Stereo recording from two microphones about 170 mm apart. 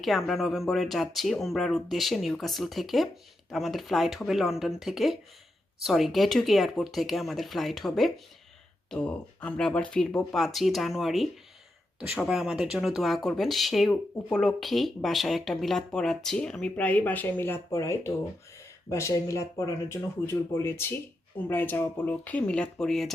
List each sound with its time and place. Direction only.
0.0 s speech: centre (ahead or behind)